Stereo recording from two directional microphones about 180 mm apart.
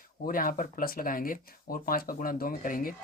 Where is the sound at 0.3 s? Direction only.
50° left (ahead or behind).